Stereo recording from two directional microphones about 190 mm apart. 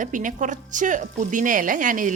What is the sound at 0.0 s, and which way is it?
Speech, 45° right (ahead or behind).